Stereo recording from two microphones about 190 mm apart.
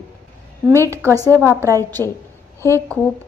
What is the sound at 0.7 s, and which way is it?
A woman's voice, 15° right (ahead or behind).